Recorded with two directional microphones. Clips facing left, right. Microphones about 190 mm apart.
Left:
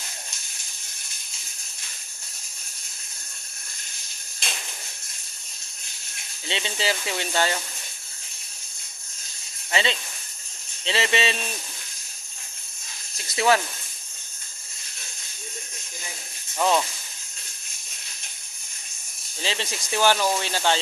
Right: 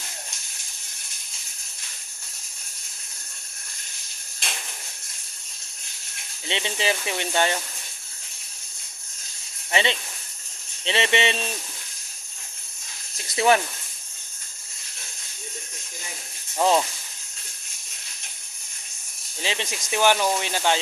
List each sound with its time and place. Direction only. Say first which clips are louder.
6.5 s speech: right 1 dB; 20° right (ahead or behind)
9.7 s speech: right 1 dB; 20° right (ahead or behind)
13.3 s speech: right 1 dB; 25° right (ahead or behind)
16.6 s speech: right 2 dB; 25° right (ahead or behind)
19.4 s speech: even; 15° right (ahead or behind)